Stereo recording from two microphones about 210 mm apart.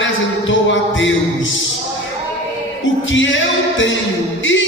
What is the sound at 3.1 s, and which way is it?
Music, 65° left (ahead or behind).